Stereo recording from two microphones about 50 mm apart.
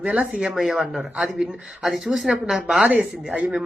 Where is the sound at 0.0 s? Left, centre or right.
Right.